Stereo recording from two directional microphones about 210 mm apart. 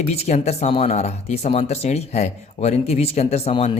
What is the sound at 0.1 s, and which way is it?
Speech, 30° left (ahead or behind).